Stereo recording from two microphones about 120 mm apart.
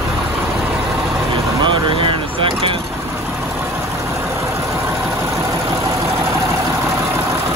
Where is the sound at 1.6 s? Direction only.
45° right (ahead or behind).